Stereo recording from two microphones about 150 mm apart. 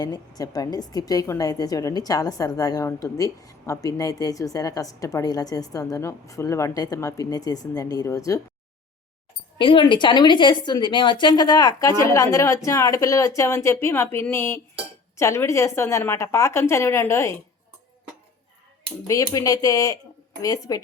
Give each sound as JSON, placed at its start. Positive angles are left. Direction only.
{"t": 0.0, "sound": "a woman's voice", "side_deg": 25}
{"t": 9.6, "sound": "a woman's voice", "side_deg": 35}
{"t": 19.0, "sound": "a woman's voice", "side_deg": 25}